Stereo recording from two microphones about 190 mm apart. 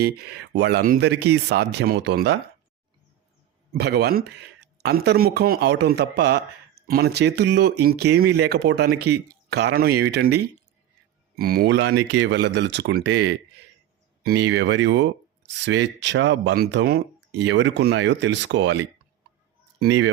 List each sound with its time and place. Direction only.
0.0 s speech: 55° right (ahead or behind)
3.7 s speech: 60° right (ahead or behind)
14.3 s speech: 65° right (ahead or behind)